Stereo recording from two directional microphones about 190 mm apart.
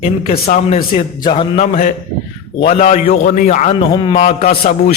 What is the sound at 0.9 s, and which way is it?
A man's voice, 25° left (ahead or behind).